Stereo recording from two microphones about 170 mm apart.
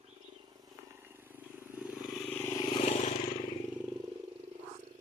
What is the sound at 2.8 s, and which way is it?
Vehicle, 40° left (ahead or behind).